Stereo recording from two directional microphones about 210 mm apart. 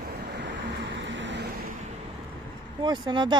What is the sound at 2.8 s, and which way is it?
Speech, 20° right (ahead or behind).